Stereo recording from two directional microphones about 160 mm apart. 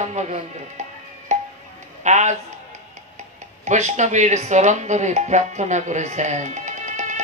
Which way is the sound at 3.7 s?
45° right (ahead or behind).